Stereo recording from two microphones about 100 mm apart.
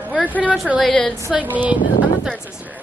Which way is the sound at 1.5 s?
15° right (ahead or behind).